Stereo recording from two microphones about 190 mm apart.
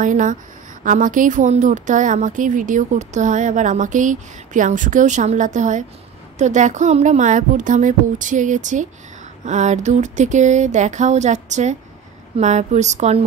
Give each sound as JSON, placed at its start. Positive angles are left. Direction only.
{"t": 0.0, "sound": "a woman's voice", "side_deg": -40}